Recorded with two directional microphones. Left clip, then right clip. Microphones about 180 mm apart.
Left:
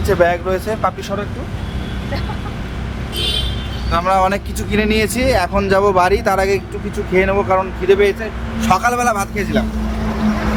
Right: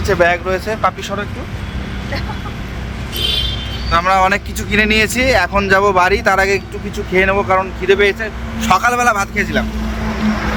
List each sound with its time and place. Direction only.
0.0 s speech: 20° right (ahead or behind)
3.9 s speech: 10° right (ahead or behind)